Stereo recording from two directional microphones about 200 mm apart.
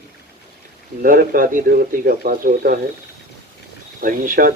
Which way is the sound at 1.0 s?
45° right (ahead or behind).